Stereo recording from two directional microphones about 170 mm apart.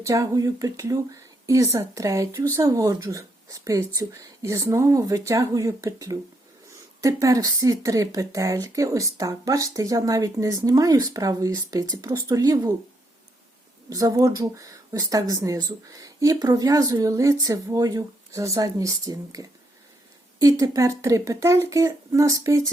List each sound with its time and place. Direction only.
0.0 s speech: 20° right (ahead or behind)
13.9 s speech: 20° right (ahead or behind)